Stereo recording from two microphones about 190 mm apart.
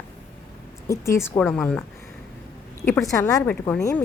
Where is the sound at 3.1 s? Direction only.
15° left (ahead or behind).